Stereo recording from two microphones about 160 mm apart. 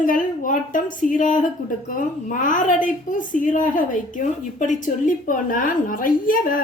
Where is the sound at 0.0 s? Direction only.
55° left (ahead or behind).